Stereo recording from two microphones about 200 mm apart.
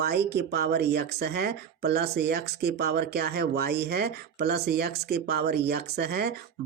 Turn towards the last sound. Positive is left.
turn(degrees=-55)  # may be behind; listen again after turning